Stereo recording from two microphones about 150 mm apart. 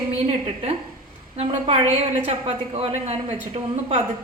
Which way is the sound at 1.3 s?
45° right (ahead or behind).